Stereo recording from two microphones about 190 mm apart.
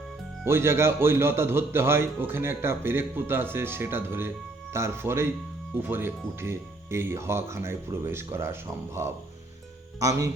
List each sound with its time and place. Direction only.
0.4 s a man's voice: 15° right (ahead or behind)